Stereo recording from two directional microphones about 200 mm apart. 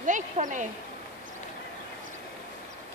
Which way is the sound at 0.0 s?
40° right (ahead or behind).